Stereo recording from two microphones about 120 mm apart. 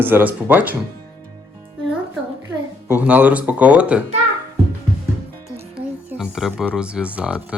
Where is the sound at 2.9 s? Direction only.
15° right (ahead or behind).